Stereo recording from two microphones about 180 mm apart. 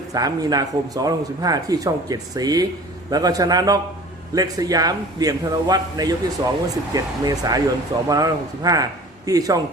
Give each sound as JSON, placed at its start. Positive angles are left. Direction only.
{"t": 0.1, "sound": "speech", "side_deg": -20}